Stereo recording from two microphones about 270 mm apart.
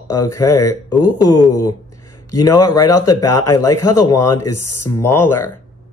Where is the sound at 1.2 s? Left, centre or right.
Left.